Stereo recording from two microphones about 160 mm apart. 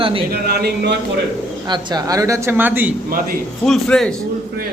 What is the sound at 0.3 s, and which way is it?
Speech, 75° right (ahead or behind).